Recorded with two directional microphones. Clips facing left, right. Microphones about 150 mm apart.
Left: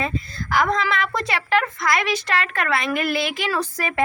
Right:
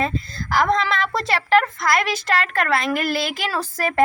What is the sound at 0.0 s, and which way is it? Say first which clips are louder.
A woman's voice: right 2 dB; 35° right (ahead or behind).